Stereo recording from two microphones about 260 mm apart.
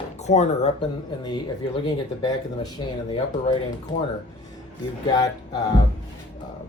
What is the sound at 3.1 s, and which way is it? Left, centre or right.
Speech, left.